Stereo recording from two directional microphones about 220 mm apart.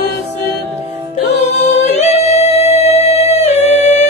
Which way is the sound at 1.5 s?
30° left (ahead or behind).